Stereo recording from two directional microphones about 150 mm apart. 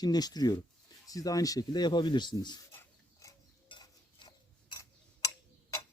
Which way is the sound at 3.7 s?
30° left (ahead or behind).